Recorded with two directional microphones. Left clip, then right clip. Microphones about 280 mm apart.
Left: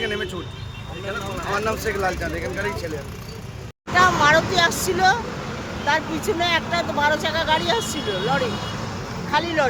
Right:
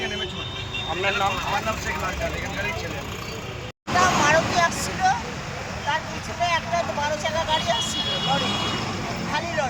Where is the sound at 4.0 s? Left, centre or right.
Centre.